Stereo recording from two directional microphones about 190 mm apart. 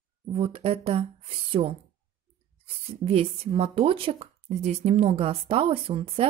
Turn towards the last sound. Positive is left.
turn(degrees=-30)  # may be behind; listen again after turning